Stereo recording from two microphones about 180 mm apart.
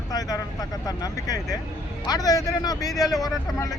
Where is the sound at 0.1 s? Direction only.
20° left (ahead or behind).